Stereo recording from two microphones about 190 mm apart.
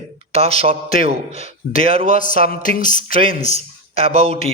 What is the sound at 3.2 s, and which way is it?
Speech, 30° right (ahead or behind).